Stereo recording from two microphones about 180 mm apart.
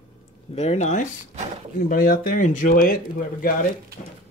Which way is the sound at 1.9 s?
50° left (ahead or behind).